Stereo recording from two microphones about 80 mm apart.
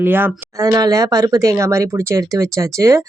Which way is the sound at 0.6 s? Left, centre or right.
Right.